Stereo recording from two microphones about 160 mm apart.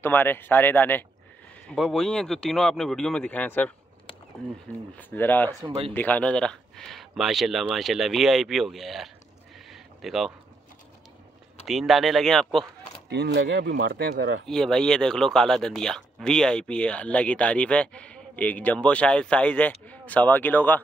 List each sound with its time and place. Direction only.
0.0 s speech: 15° left (ahead or behind)
4.9 s speech: 10° left (ahead or behind)
5.5 s speech: 20° right (ahead or behind)
5.9 s speech: 10° left (ahead or behind)
9.7 s a sound: centre (ahead or behind)
11.6 s speech: centre (ahead or behind)
13.1 s speech: 90° right
14.4 s speech: 5° left (ahead or behind)